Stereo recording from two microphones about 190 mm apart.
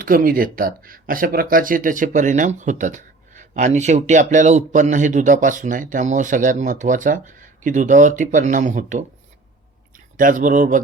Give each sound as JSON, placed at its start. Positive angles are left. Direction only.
{"t": 0.0, "sound": "speech", "side_deg": -45}
{"t": 10.2, "sound": "speech", "side_deg": -45}